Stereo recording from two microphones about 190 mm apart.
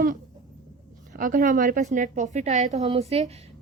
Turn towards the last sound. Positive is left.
turn(degrees=-35)  # may be behind; listen again after turning